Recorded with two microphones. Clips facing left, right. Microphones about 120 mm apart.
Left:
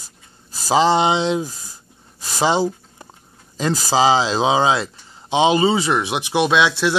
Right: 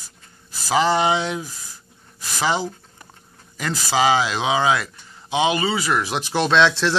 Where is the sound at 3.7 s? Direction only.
35° left (ahead or behind); by 7.0 s 10° left (ahead or behind).